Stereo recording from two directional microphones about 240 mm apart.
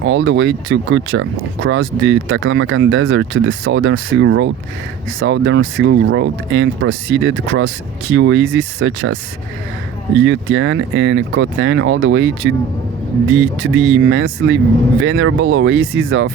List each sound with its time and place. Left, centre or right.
0.0 s speech: right
10.2 s speech: right